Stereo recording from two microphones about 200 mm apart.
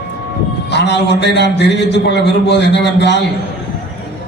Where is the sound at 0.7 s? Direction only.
60° left (ahead or behind).